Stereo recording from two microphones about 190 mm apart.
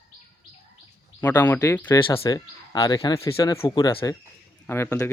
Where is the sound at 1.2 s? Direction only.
10° left (ahead or behind).